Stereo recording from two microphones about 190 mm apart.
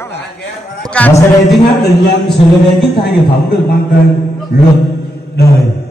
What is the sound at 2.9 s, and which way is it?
Speech, 60° left (ahead or behind).